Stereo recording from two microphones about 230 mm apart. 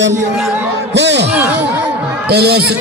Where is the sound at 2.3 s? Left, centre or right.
Right.